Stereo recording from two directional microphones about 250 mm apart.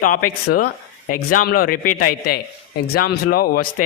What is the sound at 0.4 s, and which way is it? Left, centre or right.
Speech, left.